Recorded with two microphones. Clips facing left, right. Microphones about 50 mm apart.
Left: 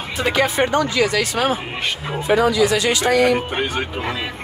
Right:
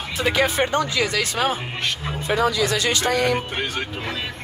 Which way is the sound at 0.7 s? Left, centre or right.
Left.